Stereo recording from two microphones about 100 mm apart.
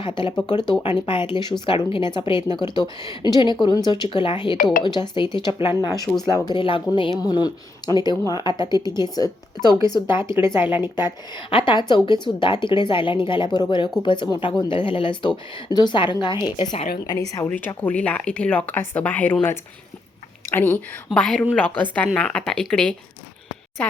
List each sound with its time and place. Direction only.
0.0 s a woman's voice: 55° left (ahead or behind)
5.8 s speech: 40° left (ahead or behind)
6.6 s speech: 55° left (ahead or behind)
7.2 s a woman's voice: 45° left (ahead or behind)
10.2 s speech: 25° right (ahead or behind)
11.5 s a woman's voice: 55° left (ahead or behind)
16.6 s speech: 90° left
17.4 s a woman's voice: 20° left (ahead or behind)
21.1 s a woman's voice: 5° left (ahead or behind)